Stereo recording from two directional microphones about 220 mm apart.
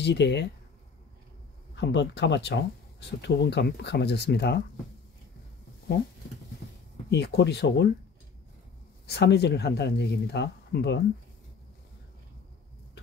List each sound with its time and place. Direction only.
0.0 s speech: 50° left (ahead or behind)
1.8 s speech: 50° left (ahead or behind)
7.1 s speech: 50° left (ahead or behind)
9.0 s speech: 50° left (ahead or behind)